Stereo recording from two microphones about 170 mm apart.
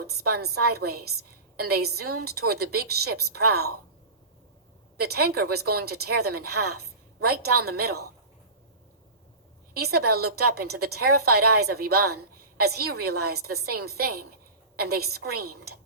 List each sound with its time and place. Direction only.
0.0 s a woman's voice: 65° right (ahead or behind)
5.0 s a woman's voice: 65° right (ahead or behind)
9.7 s a woman's voice: 65° right (ahead or behind)